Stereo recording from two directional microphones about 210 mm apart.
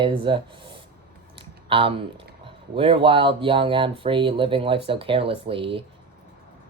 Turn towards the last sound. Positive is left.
turn(degrees=-25)  # may be behind; listen again after turning